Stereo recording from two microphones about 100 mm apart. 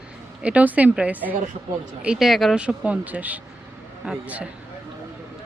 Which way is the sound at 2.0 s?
5° right (ahead or behind).